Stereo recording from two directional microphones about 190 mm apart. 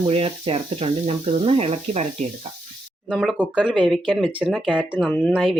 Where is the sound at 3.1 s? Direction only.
Centre (ahead or behind).